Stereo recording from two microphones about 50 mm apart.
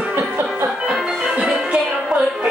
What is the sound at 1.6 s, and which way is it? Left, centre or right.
Music, centre.